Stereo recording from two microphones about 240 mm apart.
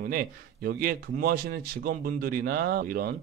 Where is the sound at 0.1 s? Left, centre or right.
Right.